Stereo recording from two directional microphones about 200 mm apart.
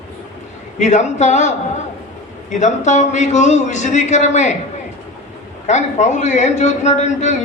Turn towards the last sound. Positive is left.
turn(degrees=35)  # may be behind; listen again after turning